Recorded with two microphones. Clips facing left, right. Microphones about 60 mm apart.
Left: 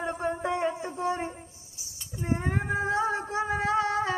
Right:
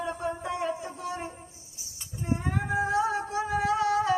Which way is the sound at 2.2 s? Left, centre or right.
Left.